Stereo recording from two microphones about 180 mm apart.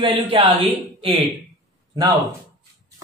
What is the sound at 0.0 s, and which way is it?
Speech, 30° right (ahead or behind).